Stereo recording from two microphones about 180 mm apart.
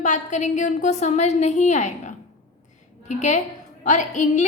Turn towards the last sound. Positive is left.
turn(degrees=40)  # may be behind; listen again after turning